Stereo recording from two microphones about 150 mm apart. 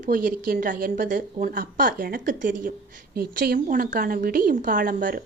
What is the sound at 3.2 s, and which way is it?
A woman's voice, 75° right (ahead or behind).